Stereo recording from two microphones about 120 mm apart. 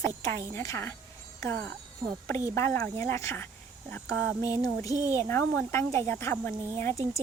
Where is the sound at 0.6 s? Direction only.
25° left (ahead or behind).